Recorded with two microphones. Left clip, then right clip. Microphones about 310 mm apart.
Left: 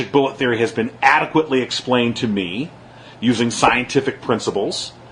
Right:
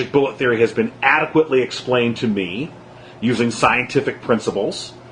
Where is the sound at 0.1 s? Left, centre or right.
Left.